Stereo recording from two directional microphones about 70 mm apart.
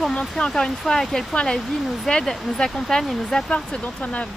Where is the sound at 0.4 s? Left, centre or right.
Centre.